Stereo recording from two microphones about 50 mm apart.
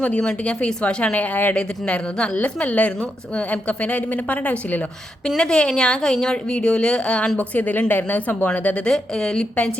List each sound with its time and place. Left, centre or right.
0.0 s a woman's voice: left
1.5 s a woman's voice: centre
5.4 s speech: centre
7.3 s speech: left
8.8 s speech: centre